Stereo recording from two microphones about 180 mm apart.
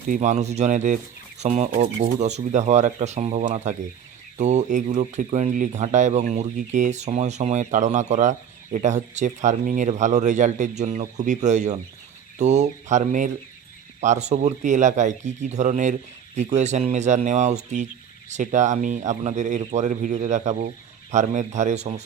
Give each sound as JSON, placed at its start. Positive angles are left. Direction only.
{"t": 0.1, "sound": "speech", "side_deg": -40}